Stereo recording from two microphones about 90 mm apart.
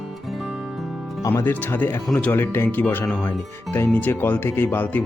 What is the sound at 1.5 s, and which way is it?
Speech, 20° left (ahead or behind).